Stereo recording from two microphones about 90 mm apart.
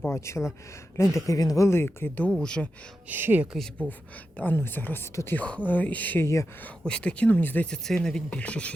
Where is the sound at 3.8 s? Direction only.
15° left (ahead or behind).